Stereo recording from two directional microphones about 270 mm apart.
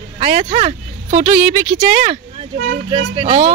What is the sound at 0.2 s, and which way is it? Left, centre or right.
A woman's voice, right.